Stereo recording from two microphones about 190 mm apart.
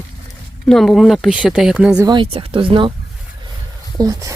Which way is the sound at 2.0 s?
20° right (ahead or behind).